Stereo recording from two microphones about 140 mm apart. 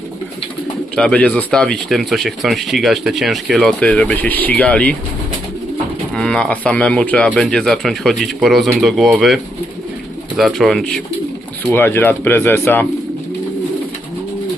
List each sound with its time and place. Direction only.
0.9 s speech: 5° left (ahead or behind)
6.1 s speech: 5° left (ahead or behind)
11.7 s speech: 15° left (ahead or behind)